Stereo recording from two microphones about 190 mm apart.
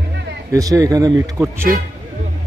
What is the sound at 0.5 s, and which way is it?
A man's voice, 15° right (ahead or behind).